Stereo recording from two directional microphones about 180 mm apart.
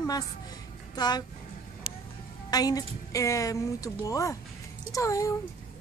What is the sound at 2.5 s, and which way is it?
A woman's voice, 20° left (ahead or behind).